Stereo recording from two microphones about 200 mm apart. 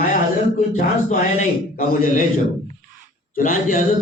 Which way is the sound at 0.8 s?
40° left (ahead or behind).